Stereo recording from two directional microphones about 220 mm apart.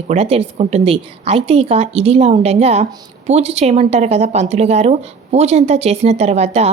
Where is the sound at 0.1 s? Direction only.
30° right (ahead or behind).